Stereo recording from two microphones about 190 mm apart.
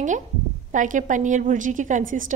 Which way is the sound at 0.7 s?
40° right (ahead or behind).